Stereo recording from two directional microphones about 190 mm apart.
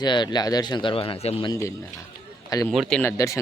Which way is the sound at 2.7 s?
Centre (ahead or behind).